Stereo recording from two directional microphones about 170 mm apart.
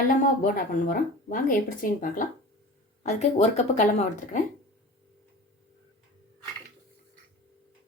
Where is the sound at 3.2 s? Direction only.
40° left (ahead or behind).